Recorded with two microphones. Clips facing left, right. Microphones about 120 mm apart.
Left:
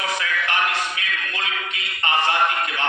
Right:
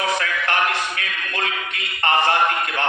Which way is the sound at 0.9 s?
55° right (ahead or behind).